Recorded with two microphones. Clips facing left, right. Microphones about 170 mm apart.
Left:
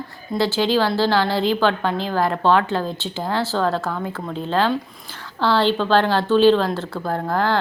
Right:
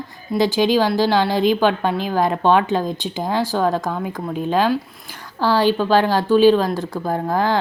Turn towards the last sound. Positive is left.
turn(degrees=-15)  # may be behind; listen again after turning